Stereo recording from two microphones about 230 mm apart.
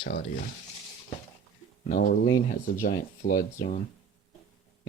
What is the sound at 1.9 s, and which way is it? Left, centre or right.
Speech, left.